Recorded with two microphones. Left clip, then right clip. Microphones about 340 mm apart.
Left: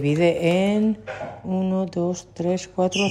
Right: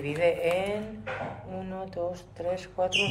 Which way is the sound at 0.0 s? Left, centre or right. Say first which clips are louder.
Left 6 dB; centre.